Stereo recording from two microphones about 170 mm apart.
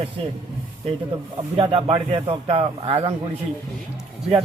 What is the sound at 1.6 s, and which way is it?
Speech, 35° right (ahead or behind).